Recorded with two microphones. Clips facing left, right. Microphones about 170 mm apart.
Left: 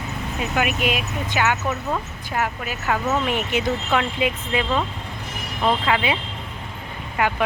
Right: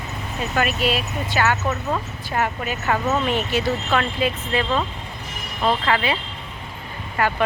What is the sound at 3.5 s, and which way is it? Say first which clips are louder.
A woman's voice: even; 20° left (ahead or behind).